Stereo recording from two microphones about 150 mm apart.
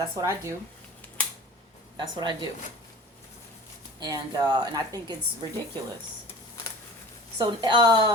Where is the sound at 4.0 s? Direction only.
25° right (ahead or behind).